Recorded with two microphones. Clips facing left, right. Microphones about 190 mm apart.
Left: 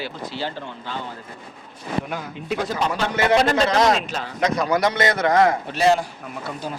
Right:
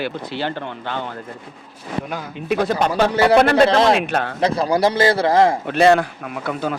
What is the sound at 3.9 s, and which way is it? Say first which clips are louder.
Speech: right 7 dB; 60° right (ahead or behind).